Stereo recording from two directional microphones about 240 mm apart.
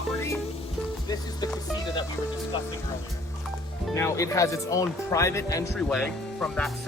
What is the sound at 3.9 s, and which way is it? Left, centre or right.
Speech, centre.